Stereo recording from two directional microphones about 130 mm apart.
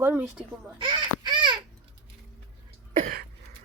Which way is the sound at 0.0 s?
15° right (ahead or behind).